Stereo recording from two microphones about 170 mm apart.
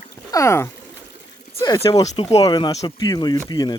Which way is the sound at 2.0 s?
40° left (ahead or behind).